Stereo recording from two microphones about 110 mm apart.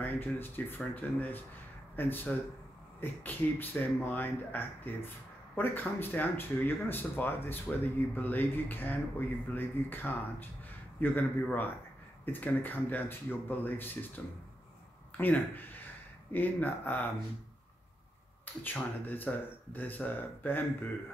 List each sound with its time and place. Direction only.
0.0 s speech: 15° left (ahead or behind)
18.4 s speech: 15° left (ahead or behind)